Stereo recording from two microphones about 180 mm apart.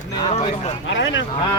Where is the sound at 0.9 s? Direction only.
90° left.